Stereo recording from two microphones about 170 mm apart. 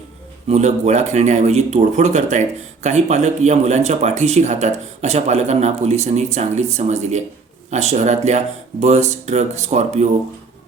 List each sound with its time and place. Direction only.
0.4 s speech: 40° right (ahead or behind)